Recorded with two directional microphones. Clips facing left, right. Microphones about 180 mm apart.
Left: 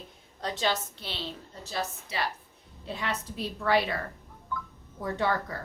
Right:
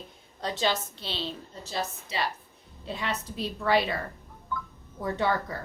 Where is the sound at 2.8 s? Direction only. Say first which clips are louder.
Right 1 dB; 25° right (ahead or behind).